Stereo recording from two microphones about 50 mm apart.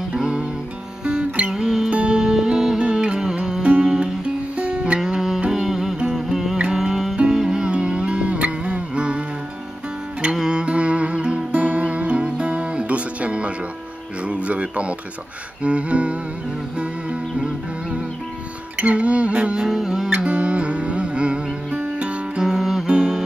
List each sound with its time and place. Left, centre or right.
0.1 s music: centre
1.5 s music: centre
10.3 s music: centre
18.8 s a sound: right
20.2 s music: right
22.4 s music: centre